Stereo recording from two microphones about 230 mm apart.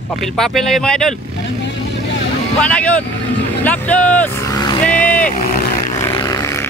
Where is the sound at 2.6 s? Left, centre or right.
Centre.